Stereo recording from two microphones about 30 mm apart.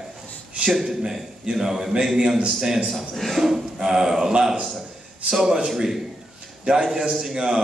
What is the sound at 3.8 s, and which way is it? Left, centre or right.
Speech, centre.